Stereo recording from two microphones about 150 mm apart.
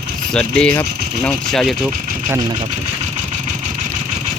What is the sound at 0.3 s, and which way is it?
Speech, 10° left (ahead or behind).